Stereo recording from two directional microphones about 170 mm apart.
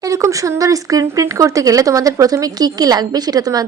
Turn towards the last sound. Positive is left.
turn(degrees=-20)  # may be behind; listen again after turning